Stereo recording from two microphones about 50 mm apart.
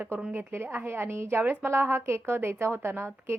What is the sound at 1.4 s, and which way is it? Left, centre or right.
A woman's voice, right.